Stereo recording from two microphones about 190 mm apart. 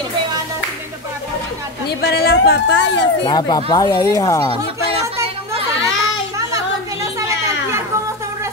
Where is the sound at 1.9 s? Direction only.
60° left (ahead or behind).